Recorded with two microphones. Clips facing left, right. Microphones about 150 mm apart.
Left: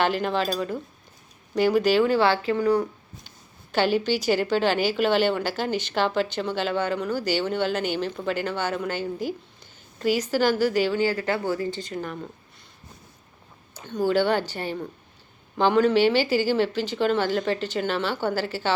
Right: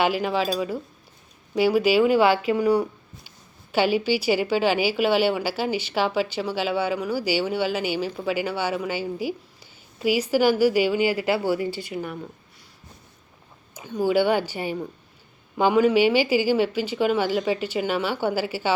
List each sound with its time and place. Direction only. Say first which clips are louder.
0.0 s a woman's voice: right 1 dB; 5° right (ahead or behind)
13.7 s a woman's voice: right 1 dB; 10° right (ahead or behind)